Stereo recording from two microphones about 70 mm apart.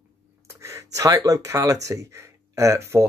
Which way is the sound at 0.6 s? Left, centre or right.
Right.